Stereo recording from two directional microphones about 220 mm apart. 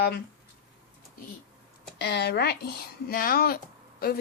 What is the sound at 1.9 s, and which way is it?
Speech, 50° left (ahead or behind).